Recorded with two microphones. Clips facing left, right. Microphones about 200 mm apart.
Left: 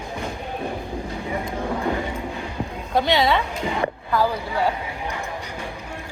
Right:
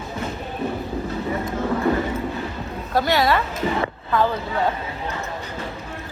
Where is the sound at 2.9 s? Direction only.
5° right (ahead or behind).